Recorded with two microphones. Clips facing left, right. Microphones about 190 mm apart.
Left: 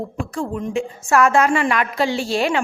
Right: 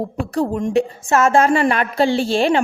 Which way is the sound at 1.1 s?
25° right (ahead or behind).